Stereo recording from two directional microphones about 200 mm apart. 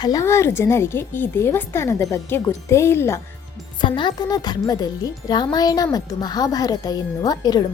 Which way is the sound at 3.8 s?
25° left (ahead or behind).